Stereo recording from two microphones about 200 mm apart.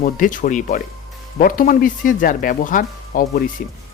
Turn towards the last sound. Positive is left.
turn(degrees=45)  # may be behind; listen again after turning